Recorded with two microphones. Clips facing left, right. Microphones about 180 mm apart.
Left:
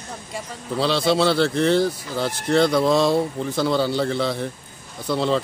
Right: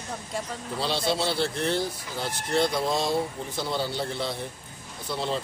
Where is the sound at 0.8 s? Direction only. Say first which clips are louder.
Left 8 dB; 90° left.